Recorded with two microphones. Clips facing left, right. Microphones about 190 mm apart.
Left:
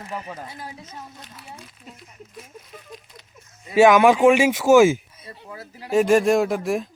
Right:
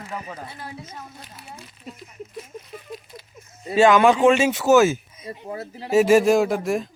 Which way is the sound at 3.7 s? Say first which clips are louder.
Left 1 dB; 10° left (ahead or behind).